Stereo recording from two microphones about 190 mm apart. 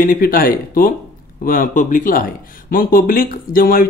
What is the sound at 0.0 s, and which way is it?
Speech, 45° left (ahead or behind).